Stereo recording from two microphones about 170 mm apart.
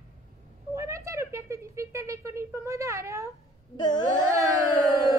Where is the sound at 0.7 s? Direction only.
15° right (ahead or behind).